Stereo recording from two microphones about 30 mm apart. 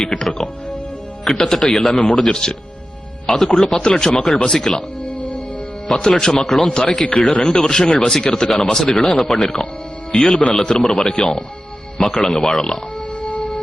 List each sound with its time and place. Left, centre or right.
0.0 s speech: centre
1.9 s speech: left
6.1 s a man's voice: centre
13.2 s music: left